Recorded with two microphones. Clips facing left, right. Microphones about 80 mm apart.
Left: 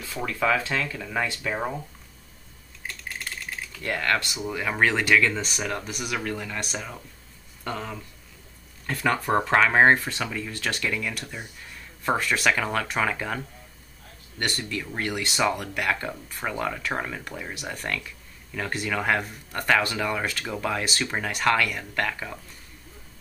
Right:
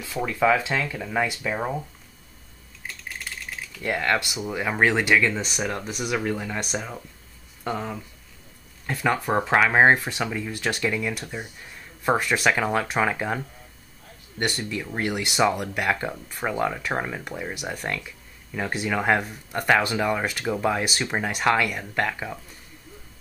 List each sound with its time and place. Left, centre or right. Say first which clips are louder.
0.0 s speech: right 4 dB; centre
1.5 s speech: right 1 dB; centre
2.9 s typing: even; centre
3.8 s speech: right 2 dB; centre
14.4 s speech: right 2 dB; centre